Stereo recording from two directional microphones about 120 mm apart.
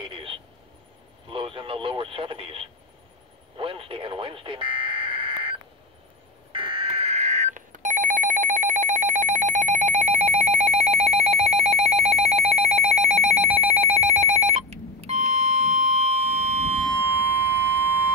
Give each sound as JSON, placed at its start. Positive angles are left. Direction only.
{"t": 0.0, "sound": "a sound", "side_deg": -50}
{"t": 1.3, "sound": "radio", "side_deg": -45}
{"t": 6.5, "sound": "telephone", "side_deg": -45}
{"t": 17.0, "sound": "civil defense siren", "side_deg": -15}